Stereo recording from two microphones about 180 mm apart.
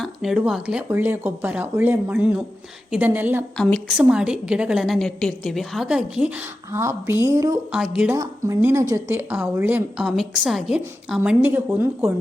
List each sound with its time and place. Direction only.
0.0 s a woman's voice: centre (ahead or behind)
3.6 s a woman's voice: centre (ahead or behind); by 7.5 s 20° right (ahead or behind)
7.7 s a woman's voice: 5° right (ahead or behind)
8.1 s a woman's voice: 15° right (ahead or behind)